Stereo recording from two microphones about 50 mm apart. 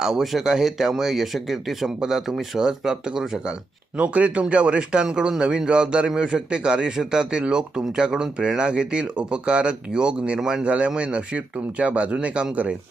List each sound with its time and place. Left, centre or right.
0.0 s speech: centre
3.9 s speech: right